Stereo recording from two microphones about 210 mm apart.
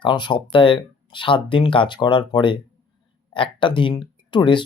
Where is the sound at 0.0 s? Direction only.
20° left (ahead or behind).